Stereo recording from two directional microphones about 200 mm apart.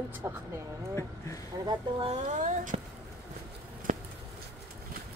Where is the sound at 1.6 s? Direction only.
25° right (ahead or behind).